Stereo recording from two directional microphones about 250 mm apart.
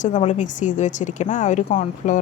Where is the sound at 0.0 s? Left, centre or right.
Left.